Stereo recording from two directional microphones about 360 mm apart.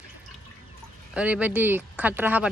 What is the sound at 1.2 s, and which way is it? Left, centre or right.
Speech, centre.